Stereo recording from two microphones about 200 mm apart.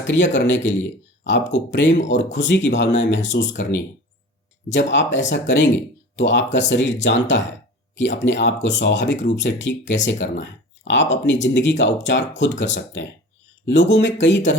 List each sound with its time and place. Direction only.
0.0 s speech: 65° left (ahead or behind)
4.7 s speech: 65° left (ahead or behind)